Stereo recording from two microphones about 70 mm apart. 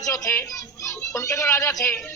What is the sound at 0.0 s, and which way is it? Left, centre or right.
A child's voice, left.